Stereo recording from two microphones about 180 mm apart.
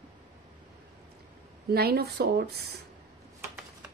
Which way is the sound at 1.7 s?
60° right (ahead or behind).